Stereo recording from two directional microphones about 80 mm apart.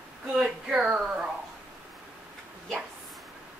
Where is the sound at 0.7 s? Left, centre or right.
Centre.